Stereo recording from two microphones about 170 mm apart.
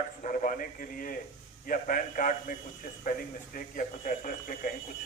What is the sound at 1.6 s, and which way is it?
A man's voice, 55° left (ahead or behind).